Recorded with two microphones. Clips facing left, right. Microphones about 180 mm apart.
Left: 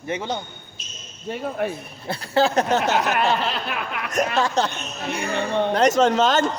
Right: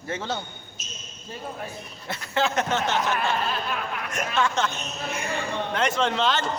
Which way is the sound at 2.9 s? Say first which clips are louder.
Left 4 dB; 70° left (ahead or behind).